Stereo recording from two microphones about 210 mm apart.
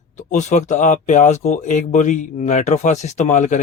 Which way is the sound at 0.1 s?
35° left (ahead or behind).